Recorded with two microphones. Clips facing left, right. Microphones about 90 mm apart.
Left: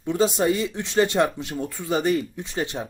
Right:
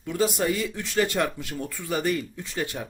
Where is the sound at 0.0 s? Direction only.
20° left (ahead or behind).